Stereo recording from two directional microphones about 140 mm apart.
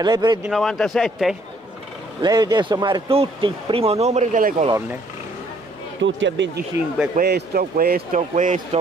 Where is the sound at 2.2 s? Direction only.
30° right (ahead or behind); by 4.6 s 70° right (ahead or behind).